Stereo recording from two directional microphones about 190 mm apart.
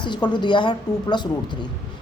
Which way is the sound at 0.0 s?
25° left (ahead or behind).